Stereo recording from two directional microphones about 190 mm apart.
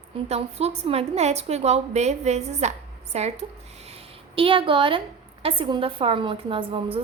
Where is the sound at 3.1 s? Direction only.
35° right (ahead or behind).